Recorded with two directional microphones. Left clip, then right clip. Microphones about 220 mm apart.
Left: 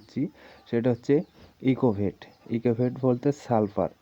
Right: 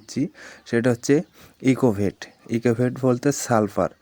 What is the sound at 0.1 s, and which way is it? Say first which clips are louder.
Speech: right 5 dB; 20° right (ahead or behind).